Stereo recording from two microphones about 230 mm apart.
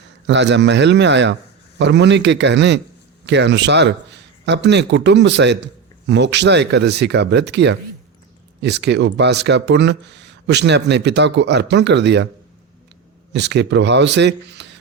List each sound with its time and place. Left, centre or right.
0.3 s a man's voice: right
13.3 s speech: right